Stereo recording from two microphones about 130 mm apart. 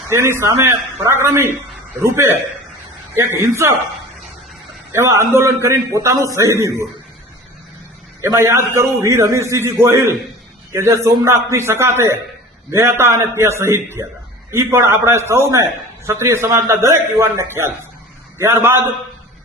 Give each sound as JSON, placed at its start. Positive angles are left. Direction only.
{"t": 0.1, "sound": "a man's voice", "side_deg": -20}
{"t": 4.9, "sound": "a man's voice", "side_deg": -20}
{"t": 8.2, "sound": "a man's voice", "side_deg": -20}